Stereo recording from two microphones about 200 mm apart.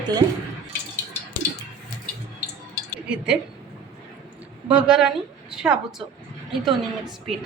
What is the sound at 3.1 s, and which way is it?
Speech, 5° right (ahead or behind).